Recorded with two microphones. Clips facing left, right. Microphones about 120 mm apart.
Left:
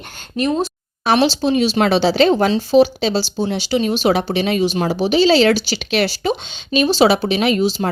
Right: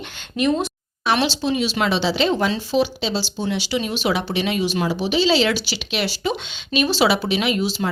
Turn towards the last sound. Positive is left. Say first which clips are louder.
# left 5 dB
turn(degrees=35)  # may be behind; listen again after turning